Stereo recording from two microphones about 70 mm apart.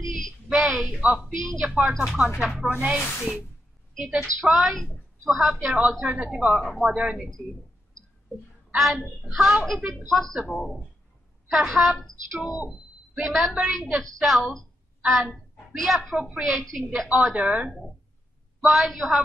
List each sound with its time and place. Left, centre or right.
0.0 s a sound: centre
1.1 s speech: centre
2.4 s speech: centre
4.3 s a woman's voice: centre
6.9 s speech: centre
7.4 s speech: centre
8.7 s speech: centre
16.2 s speech: centre
16.4 s speech: centre
18.6 s speech: centre